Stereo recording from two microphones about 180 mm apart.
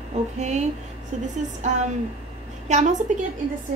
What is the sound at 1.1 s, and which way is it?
Speech, 40° right (ahead or behind).